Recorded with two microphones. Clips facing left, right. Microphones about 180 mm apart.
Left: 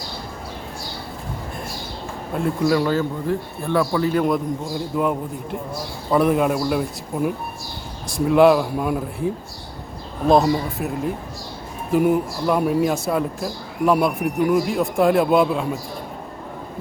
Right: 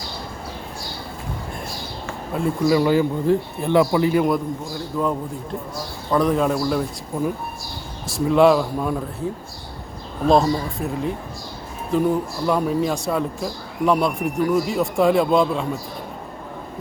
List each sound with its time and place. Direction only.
2.3 s speech: centre (ahead or behind)
4.9 s speech: 15° left (ahead or behind)
10.4 s speech: 10° left (ahead or behind)
11.9 s speech: 10° left (ahead or behind)